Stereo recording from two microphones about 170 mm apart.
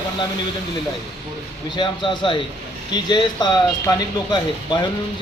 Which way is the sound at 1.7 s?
25° left (ahead or behind).